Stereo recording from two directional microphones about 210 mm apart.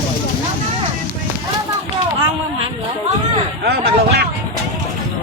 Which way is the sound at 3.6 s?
50° right (ahead or behind).